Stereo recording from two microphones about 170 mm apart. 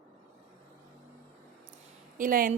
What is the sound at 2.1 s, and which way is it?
Speech, 55° right (ahead or behind).